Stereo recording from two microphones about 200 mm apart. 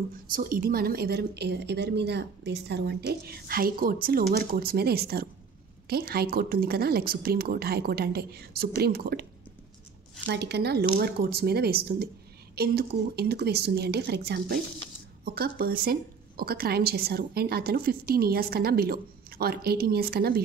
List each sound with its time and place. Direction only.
0.1 s a woman's voice: 45° right (ahead or behind)
10.2 s a woman's voice: 55° right (ahead or behind)